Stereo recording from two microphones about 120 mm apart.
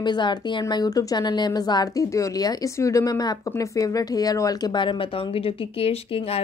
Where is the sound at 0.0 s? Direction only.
40° left (ahead or behind).